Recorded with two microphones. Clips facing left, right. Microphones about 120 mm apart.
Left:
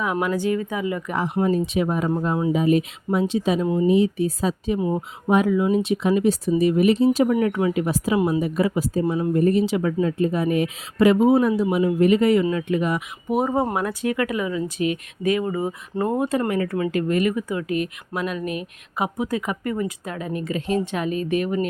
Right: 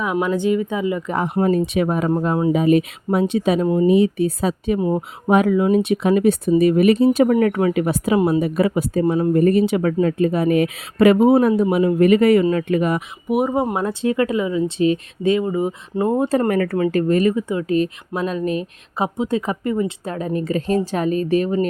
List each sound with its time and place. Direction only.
0.0 s speech: 20° right (ahead or behind)
1.1 s speech: 50° right (ahead or behind)
4.8 s speech: 35° right (ahead or behind)
5.3 s speech: 60° right (ahead or behind)
13.2 s speech: 10° right (ahead or behind)
13.7 s speech: 25° right (ahead or behind)
16.5 s speech: 55° right (ahead or behind)
16.7 s speech: 35° right (ahead or behind)